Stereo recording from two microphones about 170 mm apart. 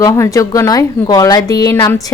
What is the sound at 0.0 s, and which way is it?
A woman's voice, 20° left (ahead or behind).